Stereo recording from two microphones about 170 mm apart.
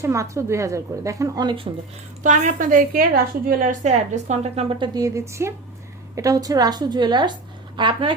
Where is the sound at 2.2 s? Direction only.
50° right (ahead or behind).